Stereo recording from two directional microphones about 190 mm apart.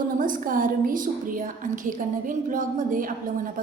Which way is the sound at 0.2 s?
45° right (ahead or behind).